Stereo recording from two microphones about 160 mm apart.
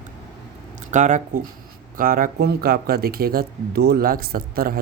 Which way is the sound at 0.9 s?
50° right (ahead or behind).